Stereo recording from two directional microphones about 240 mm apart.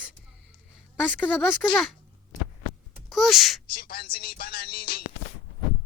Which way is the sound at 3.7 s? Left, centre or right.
Left.